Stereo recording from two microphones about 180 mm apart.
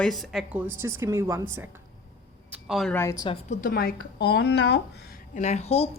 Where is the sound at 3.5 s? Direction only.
50° left (ahead or behind).